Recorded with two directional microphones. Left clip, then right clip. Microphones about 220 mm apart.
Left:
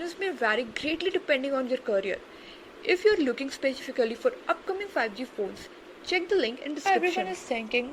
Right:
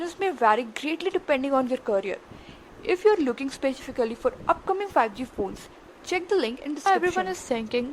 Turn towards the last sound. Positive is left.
turn(degrees=-20)  # may be behind; listen again after turning